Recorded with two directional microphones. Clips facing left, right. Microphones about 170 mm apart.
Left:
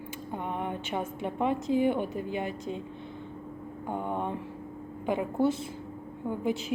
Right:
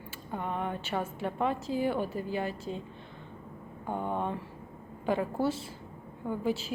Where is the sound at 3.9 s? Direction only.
15° left (ahead or behind).